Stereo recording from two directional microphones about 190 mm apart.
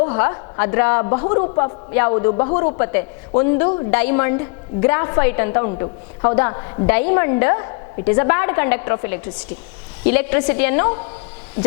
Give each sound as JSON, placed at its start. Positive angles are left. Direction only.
{"t": 0.0, "sound": "a woman's voice", "side_deg": 15}